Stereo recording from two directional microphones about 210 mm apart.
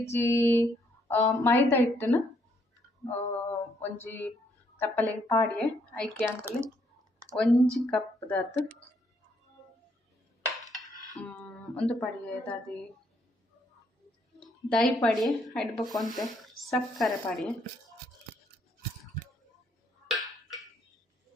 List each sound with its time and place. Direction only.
0.1 s speech: 10° left (ahead or behind)
3.0 s a sound: 10° left (ahead or behind)
4.8 s a woman's voice: 10° left (ahead or behind)
6.2 s speech: 10° right (ahead or behind)
7.3 s speech: 5° left (ahead or behind)
11.2 s speech: 5° left (ahead or behind)
14.3 s a woman's voice: centre (ahead or behind)
15.7 s speech: 20° left (ahead or behind)
16.4 s speech: centre (ahead or behind)
20.1 s tick-tock: centre (ahead or behind)